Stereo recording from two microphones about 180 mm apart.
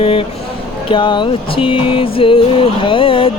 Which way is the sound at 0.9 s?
25° left (ahead or behind).